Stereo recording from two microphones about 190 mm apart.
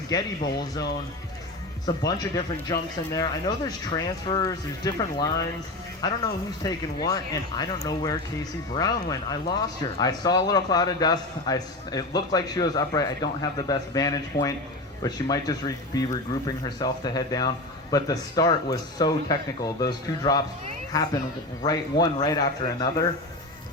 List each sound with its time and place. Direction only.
0.1 s speech: 20° left (ahead or behind)
2.0 s speech: 20° left (ahead or behind)